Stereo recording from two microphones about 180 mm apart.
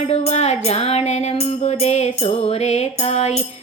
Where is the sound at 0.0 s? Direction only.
35° left (ahead or behind).